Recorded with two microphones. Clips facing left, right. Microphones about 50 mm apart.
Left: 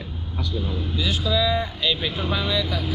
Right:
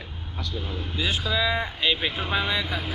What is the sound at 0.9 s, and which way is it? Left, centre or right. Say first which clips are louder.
Speech: left 2 dB; right.